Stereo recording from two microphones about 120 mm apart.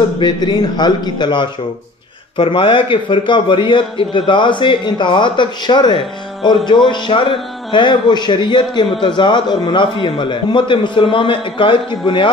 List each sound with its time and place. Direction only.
0.2 s a man's voice: 35° left (ahead or behind)